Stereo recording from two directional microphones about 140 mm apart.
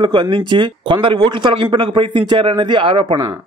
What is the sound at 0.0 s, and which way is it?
Speech, 35° right (ahead or behind).